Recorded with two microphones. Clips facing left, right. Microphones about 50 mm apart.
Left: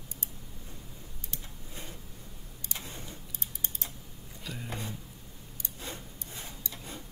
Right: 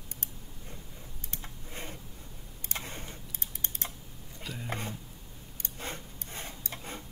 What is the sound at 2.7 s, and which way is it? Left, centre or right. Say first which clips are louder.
Typing: right 3 dB; right.